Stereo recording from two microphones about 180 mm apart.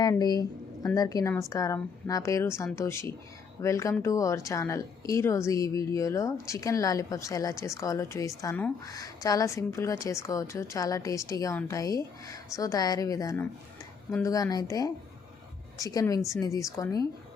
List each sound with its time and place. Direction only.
0.0 s a woman's voice: 20° left (ahead or behind)